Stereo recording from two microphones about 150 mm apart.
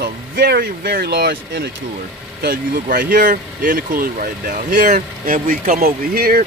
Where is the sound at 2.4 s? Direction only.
75° right (ahead or behind).